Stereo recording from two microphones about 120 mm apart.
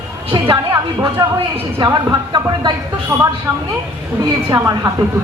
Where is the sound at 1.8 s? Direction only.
40° right (ahead or behind).